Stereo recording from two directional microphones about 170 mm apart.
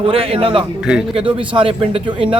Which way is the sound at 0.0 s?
35° right (ahead or behind).